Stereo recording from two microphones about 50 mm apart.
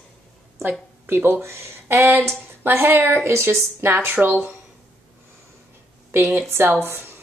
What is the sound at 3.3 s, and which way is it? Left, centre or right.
Speech, right.